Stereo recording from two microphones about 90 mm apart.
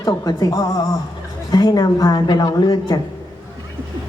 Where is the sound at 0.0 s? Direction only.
40° left (ahead or behind).